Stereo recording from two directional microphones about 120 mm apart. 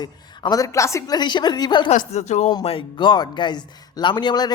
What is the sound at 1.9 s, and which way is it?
Speech, 75° left (ahead or behind).